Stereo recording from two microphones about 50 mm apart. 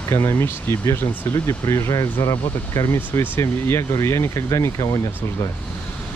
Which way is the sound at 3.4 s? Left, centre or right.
Left.